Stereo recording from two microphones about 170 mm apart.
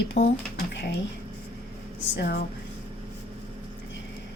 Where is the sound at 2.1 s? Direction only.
85° left.